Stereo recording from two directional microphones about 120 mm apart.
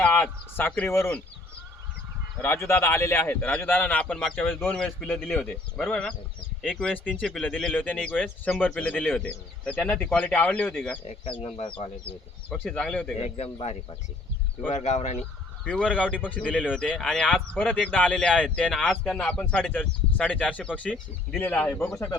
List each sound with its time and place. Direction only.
0.0 s a man's voice: 15° left (ahead or behind)
2.4 s a man's voice: 20° left (ahead or behind)
11.3 s speech: 50° left (ahead or behind)
12.6 s a man's voice: 10° left (ahead or behind)
13.1 s a man's voice: 60° left (ahead or behind)
14.7 s speech: 80° left
15.2 s a man's voice: 10° left (ahead or behind)